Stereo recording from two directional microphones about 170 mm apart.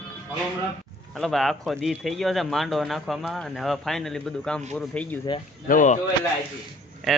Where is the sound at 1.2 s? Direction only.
Centre (ahead or behind).